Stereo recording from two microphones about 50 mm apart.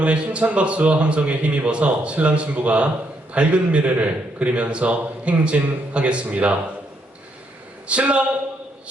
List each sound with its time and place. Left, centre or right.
0.0 s a man's voice: right
7.9 s a man's voice: right